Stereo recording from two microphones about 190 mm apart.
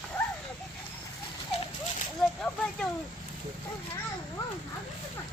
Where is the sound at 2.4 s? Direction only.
5° left (ahead or behind).